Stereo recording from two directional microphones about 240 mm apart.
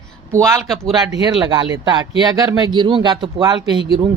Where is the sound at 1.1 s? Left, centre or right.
Centre.